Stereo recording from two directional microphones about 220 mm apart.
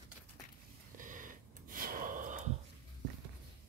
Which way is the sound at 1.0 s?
35° right (ahead or behind).